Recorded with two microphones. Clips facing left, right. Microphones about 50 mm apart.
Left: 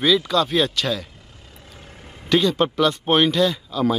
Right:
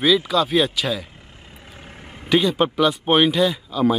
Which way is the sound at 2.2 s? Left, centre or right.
Centre.